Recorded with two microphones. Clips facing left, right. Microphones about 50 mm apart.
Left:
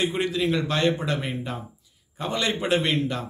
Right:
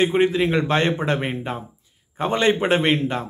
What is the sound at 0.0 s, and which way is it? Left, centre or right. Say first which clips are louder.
Speech: right 6 dB; right.